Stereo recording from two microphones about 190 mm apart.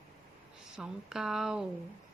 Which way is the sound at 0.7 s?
Centre (ahead or behind).